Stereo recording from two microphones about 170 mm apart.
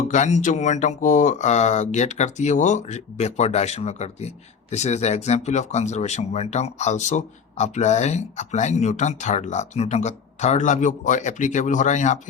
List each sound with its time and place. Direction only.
0.1 s speech: 45° left (ahead or behind)